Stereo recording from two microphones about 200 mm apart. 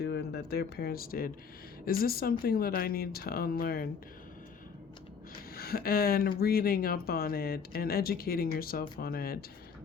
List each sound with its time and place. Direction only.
0.0 s speech: 55° left (ahead or behind)
5.5 s speech: 50° left (ahead or behind)